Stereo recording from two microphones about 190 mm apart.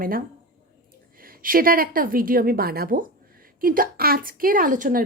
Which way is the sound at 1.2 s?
50° right (ahead or behind).